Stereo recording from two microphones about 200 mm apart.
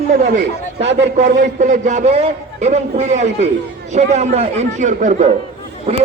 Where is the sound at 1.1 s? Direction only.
35° right (ahead or behind).